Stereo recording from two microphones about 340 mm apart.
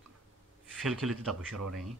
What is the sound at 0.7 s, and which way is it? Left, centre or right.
Speech, centre.